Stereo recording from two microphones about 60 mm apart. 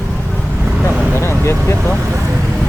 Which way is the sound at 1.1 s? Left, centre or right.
Left.